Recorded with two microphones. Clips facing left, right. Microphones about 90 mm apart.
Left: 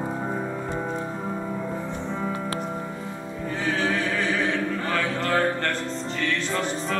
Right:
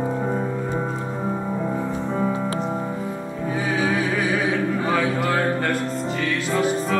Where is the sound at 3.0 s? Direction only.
10° right (ahead or behind).